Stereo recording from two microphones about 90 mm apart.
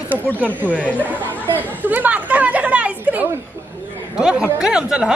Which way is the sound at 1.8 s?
20° right (ahead or behind).